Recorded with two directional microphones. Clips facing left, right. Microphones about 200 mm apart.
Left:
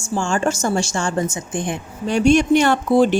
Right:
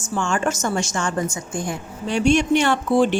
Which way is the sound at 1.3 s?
20° left (ahead or behind).